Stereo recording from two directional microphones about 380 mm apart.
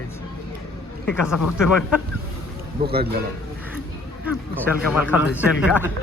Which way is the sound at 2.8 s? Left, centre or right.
Right.